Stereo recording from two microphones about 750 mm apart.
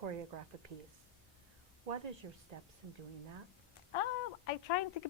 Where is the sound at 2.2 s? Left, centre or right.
Right.